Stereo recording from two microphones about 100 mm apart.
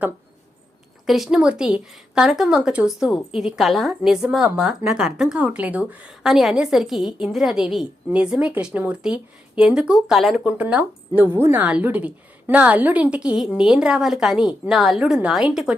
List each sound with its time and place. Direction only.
1.0 s a woman's voice: centre (ahead or behind)
10.3 s speech: 15° right (ahead or behind)